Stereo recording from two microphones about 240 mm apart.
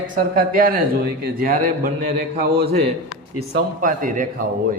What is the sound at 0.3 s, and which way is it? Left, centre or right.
A man's voice, right.